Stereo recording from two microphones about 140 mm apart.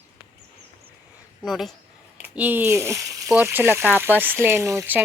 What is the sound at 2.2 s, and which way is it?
Speech, 10° right (ahead or behind).